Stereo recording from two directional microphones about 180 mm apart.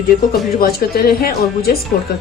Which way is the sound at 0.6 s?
60° left (ahead or behind).